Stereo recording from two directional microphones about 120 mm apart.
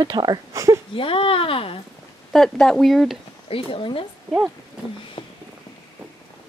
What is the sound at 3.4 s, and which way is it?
Speech, 50° left (ahead or behind).